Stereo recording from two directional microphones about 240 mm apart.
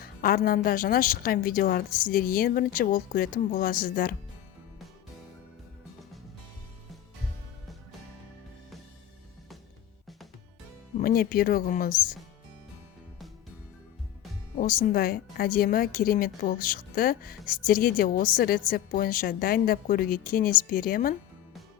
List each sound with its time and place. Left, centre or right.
0.0 s a woman's voice: left
10.9 s a woman's voice: left
14.6 s a woman's voice: left